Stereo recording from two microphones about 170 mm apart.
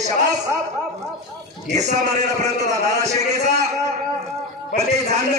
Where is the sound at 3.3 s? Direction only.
40° right (ahead or behind).